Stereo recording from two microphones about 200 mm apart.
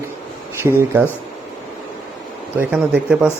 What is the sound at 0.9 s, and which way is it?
Speech, 10° right (ahead or behind).